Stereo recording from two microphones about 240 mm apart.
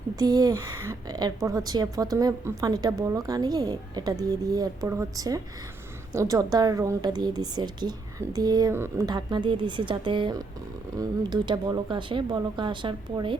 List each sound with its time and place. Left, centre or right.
0.2 s a woman's voice: centre